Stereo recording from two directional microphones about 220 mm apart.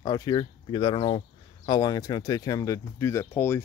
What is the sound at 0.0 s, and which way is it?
Speech, 20° left (ahead or behind).